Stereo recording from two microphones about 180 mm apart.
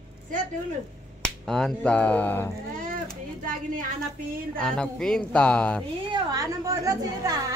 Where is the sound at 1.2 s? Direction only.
Centre (ahead or behind).